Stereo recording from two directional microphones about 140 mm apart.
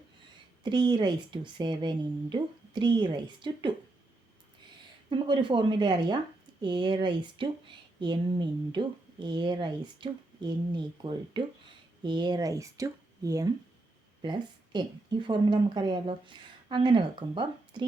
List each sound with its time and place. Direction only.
0.6 s a woman's voice: 30° right (ahead or behind)
5.0 s a woman's voice: 35° right (ahead or behind)